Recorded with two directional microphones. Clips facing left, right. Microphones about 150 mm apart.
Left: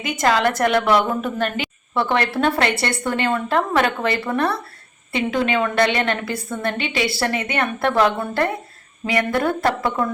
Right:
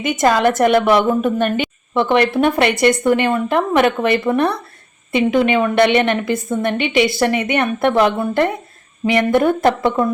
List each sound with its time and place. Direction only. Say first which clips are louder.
0.0 s a woman's voice: right 4 dB; 20° right (ahead or behind)